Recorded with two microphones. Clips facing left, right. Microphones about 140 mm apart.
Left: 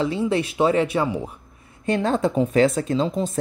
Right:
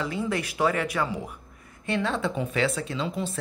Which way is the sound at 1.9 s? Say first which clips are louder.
Left 6 dB; 40° left (ahead or behind).